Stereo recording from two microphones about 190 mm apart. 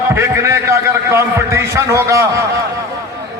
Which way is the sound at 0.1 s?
15° right (ahead or behind).